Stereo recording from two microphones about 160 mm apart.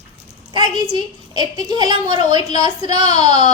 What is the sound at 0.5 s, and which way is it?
A child's voice, 30° right (ahead or behind).